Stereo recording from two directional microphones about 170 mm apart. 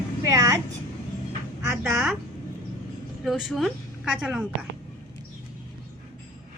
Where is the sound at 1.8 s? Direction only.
5° right (ahead or behind).